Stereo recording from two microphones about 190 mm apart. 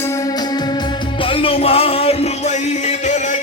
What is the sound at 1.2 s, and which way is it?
Music, 30° left (ahead or behind).